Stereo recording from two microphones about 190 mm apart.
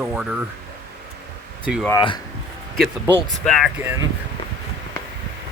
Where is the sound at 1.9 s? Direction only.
20° left (ahead or behind).